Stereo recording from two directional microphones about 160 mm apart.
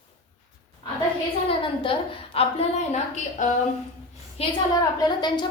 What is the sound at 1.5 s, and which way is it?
A woman's voice, 35° left (ahead or behind).